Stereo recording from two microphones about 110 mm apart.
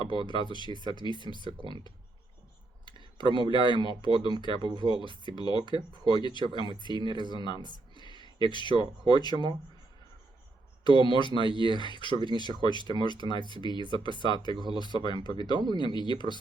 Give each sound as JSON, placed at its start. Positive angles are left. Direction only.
{"t": 0.0, "sound": "speech", "side_deg": 45}
{"t": 7.6, "sound": "a sound", "side_deg": -45}
{"t": 8.0, "sound": "speech", "side_deg": 45}
{"t": 10.8, "sound": "speech", "side_deg": 45}